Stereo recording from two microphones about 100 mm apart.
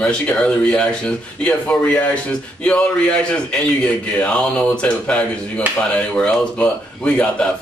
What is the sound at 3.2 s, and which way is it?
A man's voice, 10° left (ahead or behind).